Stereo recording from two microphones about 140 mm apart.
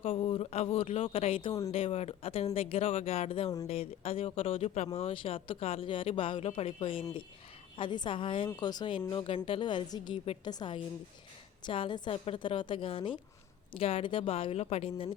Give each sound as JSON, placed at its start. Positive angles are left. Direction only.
{"t": 0.0, "sound": "speech", "side_deg": 40}